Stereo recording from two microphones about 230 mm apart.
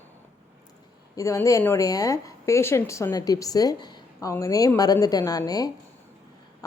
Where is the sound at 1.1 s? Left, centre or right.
Centre.